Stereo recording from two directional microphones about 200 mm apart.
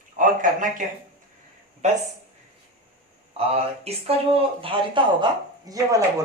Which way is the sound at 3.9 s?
30° right (ahead or behind).